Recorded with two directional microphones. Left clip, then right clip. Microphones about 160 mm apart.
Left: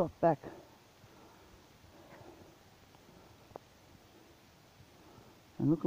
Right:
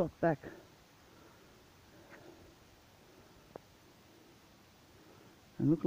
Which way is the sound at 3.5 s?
50° right (ahead or behind).